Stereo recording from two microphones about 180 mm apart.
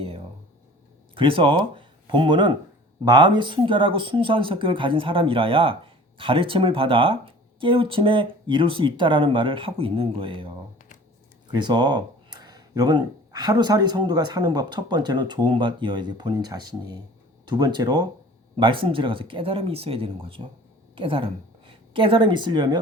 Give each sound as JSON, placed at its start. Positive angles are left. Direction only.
{"t": 1.1, "sound": "speech", "side_deg": -30}
{"t": 11.5, "sound": "a woman's voice", "side_deg": -25}